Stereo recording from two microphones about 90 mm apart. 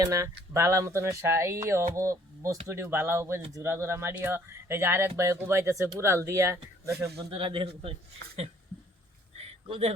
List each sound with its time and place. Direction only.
0.0 s speech: 35° right (ahead or behind)
7.2 s a man's voice: 65° right (ahead or behind); by 7.9 s 90° right